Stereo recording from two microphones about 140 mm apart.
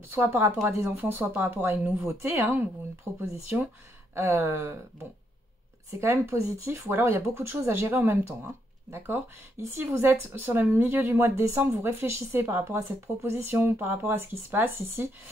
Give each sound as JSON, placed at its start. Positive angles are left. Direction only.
{"t": 0.1, "sound": "speech", "side_deg": -20}
{"t": 5.9, "sound": "speech", "side_deg": -20}